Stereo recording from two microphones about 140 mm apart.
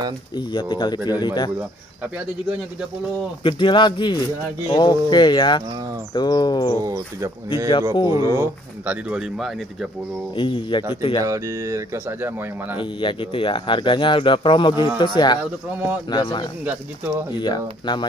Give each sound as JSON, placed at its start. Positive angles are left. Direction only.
{"t": 0.5, "sound": "speech", "side_deg": 35}
{"t": 3.4, "sound": "speech", "side_deg": 35}
{"t": 6.8, "sound": "speech", "side_deg": -25}
{"t": 8.8, "sound": "speech", "side_deg": -5}
{"t": 10.3, "sound": "speech", "side_deg": 35}
{"t": 11.2, "sound": "speech", "side_deg": -20}
{"t": 13.0, "sound": "speech", "side_deg": 40}